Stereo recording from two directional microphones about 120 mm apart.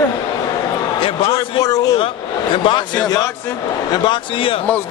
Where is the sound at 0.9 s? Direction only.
45° left (ahead or behind).